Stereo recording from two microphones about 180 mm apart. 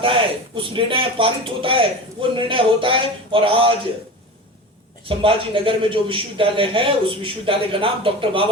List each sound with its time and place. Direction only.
0.0 s a man's voice: 30° right (ahead or behind)
5.0 s a man's voice: 30° right (ahead or behind)